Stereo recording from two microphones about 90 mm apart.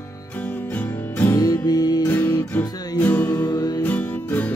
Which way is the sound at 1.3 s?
40° left (ahead or behind).